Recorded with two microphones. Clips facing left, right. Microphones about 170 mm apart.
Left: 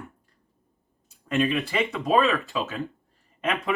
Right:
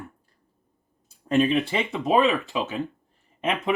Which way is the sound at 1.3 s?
35° right (ahead or behind).